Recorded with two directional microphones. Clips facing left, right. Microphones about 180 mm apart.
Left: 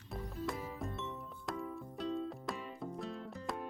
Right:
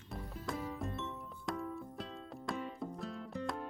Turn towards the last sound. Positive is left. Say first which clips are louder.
# right 2 dB
turn(degrees=0)  # may be behind; listen again after turning